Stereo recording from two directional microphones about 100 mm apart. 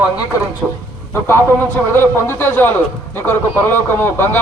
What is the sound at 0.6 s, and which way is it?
Speech, 5° right (ahead or behind).